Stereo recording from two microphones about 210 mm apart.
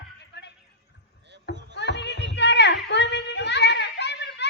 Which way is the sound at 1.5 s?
55° left (ahead or behind).